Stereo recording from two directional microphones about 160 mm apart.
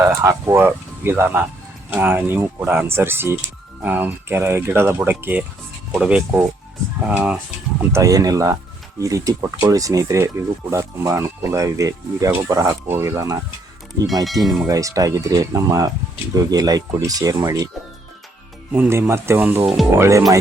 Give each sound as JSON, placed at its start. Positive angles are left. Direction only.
{"t": 0.0, "sound": "speech", "side_deg": -20}
{"t": 7.8, "sound": "speech", "side_deg": -20}
{"t": 14.4, "sound": "speech", "side_deg": 0}
{"t": 14.7, "sound": "speech", "side_deg": -20}
{"t": 18.7, "sound": "speech", "side_deg": -15}